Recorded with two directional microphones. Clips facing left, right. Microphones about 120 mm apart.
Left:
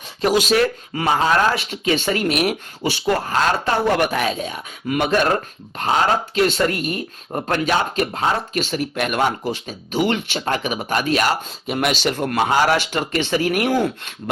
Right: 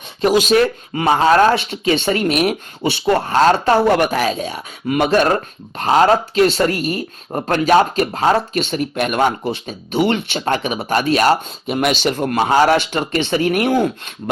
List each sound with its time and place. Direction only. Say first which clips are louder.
0.2 s speech: right 3 dB; 20° right (ahead or behind)
0.5 s speech: right 3 dB; 30° right (ahead or behind)
8.5 s speech: right 3 dB; 25° right (ahead or behind)